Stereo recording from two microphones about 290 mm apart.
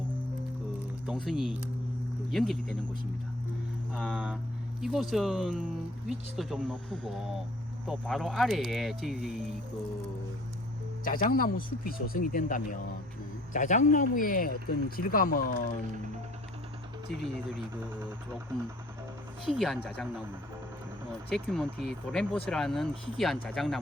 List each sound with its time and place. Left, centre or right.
1.0 s speech: centre
3.9 s speech: centre
11.0 s speech: left
19.5 s speech: centre
21.2 s speech: centre